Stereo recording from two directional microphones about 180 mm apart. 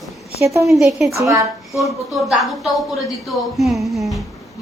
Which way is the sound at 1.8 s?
Centre (ahead or behind).